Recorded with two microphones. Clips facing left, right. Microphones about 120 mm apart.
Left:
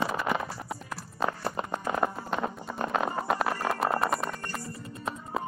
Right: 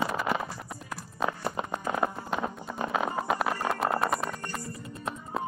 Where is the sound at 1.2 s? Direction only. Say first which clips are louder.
Even; centre (ahead or behind).